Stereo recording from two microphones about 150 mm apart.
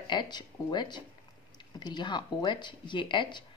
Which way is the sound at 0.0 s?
30° left (ahead or behind).